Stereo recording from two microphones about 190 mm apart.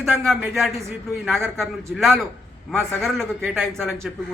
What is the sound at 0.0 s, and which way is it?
A man's voice, centre (ahead or behind).